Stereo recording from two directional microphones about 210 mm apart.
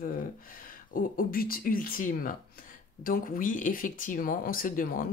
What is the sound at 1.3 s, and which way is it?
Speech, 45° left (ahead or behind).